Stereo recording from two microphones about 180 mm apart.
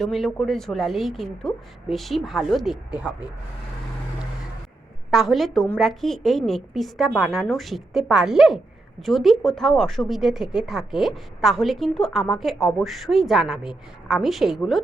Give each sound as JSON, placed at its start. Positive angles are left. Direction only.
{"t": 0.0, "sound": "a woman's voice", "side_deg": 0}
{"t": 5.1, "sound": "a woman's voice", "side_deg": 0}